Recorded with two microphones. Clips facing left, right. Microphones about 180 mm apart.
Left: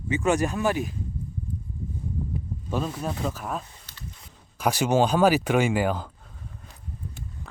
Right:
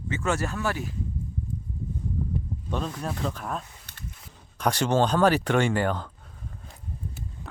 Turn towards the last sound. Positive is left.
turn(degrees=5)  # may be behind; listen again after turning